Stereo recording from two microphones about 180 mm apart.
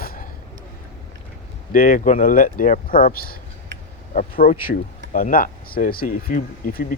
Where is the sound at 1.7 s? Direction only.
50° left (ahead or behind).